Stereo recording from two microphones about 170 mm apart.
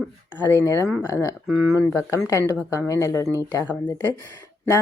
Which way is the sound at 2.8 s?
15° left (ahead or behind).